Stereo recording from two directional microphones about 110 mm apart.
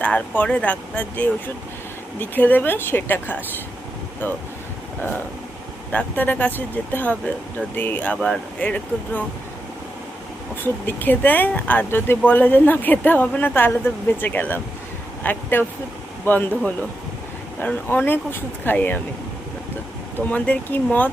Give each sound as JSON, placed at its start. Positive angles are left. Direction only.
{"t": 0.0, "sound": "speech", "side_deg": 10}
{"t": 5.9, "sound": "speech", "side_deg": 15}
{"t": 10.6, "sound": "speech", "side_deg": 15}
{"t": 20.1, "sound": "speech", "side_deg": 15}